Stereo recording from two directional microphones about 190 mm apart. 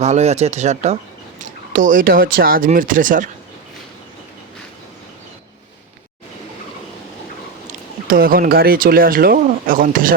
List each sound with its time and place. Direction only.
0.0 s speech: 35° right (ahead or behind)
1.9 s speech: 50° right (ahead or behind)
8.1 s speech: 50° right (ahead or behind)